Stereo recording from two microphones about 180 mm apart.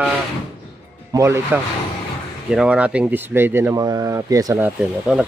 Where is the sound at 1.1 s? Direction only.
15° right (ahead or behind).